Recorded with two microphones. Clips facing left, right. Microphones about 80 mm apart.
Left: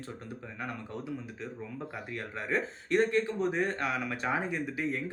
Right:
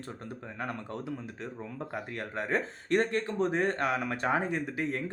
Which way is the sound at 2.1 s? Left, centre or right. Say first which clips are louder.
Right 1 dB; right.